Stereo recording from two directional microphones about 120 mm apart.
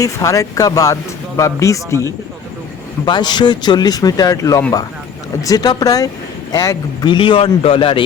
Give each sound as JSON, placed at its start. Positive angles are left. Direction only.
{"t": 0.0, "sound": "speech", "side_deg": 30}
{"t": 3.1, "sound": "a man's voice", "side_deg": 35}